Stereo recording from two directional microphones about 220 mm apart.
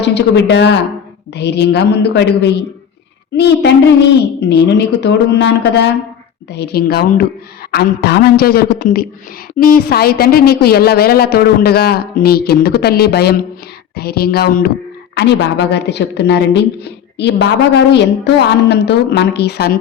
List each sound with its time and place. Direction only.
0.0 s a woman's voice: 50° left (ahead or behind)